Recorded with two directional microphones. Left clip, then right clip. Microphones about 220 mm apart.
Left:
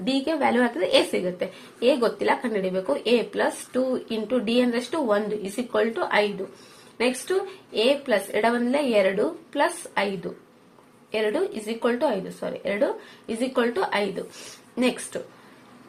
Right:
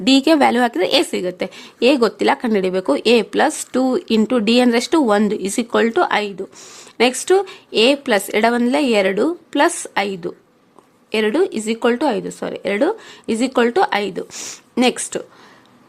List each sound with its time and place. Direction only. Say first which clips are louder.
0.0 s a woman's voice: right 10 dB; 45° right (ahead or behind)
11.1 s a woman's voice: right 7 dB; 50° right (ahead or behind)